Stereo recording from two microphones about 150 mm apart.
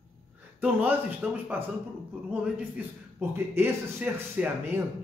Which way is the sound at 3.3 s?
15° right (ahead or behind).